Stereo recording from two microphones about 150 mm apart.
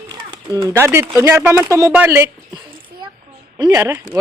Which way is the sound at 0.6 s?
20° right (ahead or behind).